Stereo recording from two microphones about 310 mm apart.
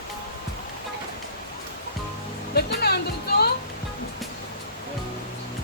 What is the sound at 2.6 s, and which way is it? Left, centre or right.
Music, left.